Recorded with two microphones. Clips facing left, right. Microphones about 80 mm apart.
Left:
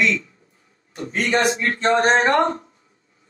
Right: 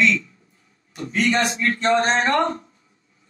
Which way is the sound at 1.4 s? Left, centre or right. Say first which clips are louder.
Left 2 dB; centre.